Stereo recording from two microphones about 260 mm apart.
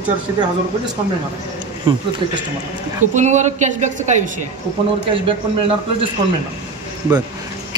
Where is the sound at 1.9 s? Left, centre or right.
Centre.